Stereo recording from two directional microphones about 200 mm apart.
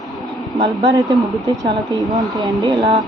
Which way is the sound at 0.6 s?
20° right (ahead or behind).